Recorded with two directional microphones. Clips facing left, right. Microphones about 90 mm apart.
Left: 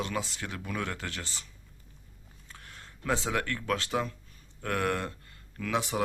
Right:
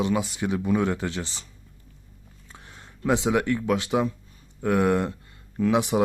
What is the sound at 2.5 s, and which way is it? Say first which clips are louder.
Speech: right 2 dB; 20° right (ahead or behind).